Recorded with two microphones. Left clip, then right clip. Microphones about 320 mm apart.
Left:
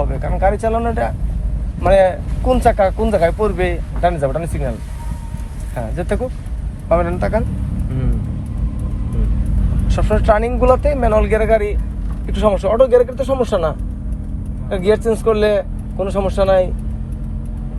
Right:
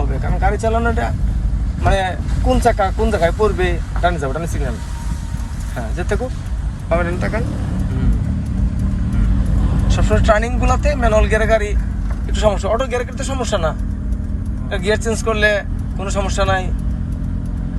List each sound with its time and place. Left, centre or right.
0.4 s speech: left
6.8 s speech: centre
9.9 s speech: centre